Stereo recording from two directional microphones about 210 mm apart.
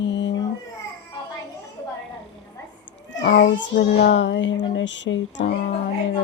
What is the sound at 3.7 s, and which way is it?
Child singing, 40° left (ahead or behind).